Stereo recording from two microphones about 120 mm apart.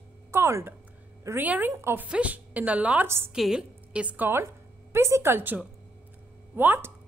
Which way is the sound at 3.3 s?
5° right (ahead or behind).